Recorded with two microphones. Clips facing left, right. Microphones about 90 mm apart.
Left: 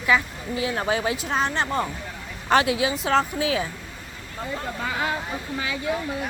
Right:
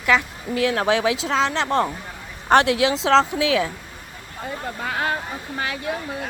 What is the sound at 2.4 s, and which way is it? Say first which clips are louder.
Speech: right 4 dB; 65° right (ahead or behind).